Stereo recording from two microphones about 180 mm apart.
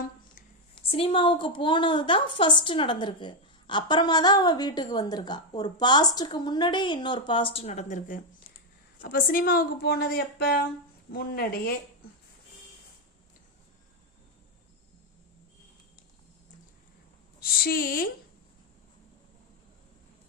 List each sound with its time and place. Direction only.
0.8 s a woman's voice: 30° left (ahead or behind); by 11.7 s 55° left (ahead or behind)
17.4 s a woman's voice: 55° left (ahead or behind)